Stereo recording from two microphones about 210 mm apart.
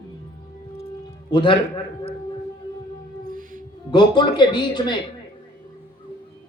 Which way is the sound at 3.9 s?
20° left (ahead or behind).